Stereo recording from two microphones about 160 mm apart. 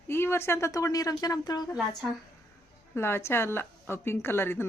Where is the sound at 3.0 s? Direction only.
15° left (ahead or behind).